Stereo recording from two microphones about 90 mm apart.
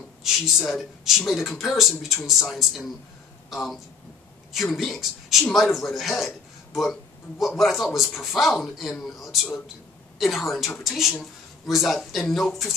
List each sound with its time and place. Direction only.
0.2 s a man's voice: 5° right (ahead or behind)